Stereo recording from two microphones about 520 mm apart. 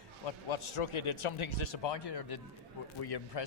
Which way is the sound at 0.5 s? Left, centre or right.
Left.